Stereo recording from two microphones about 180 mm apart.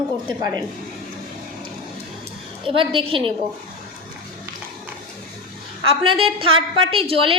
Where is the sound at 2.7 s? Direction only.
30° right (ahead or behind).